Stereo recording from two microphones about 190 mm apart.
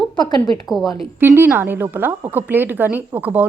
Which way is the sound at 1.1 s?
10° right (ahead or behind).